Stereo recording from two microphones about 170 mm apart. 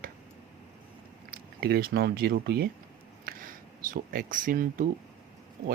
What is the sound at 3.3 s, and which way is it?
Speech, 55° right (ahead or behind).